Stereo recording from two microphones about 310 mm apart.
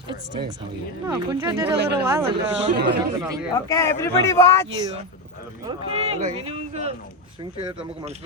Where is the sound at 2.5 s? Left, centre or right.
Right.